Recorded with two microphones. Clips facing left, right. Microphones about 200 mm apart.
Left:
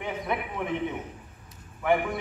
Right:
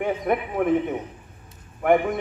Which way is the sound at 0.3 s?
50° right (ahead or behind).